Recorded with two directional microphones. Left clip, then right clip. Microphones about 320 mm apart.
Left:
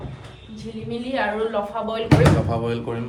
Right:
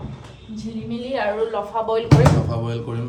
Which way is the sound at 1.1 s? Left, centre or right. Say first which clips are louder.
Right 1 dB; right.